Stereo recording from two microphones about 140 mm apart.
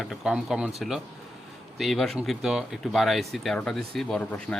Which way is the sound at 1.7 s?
Centre (ahead or behind).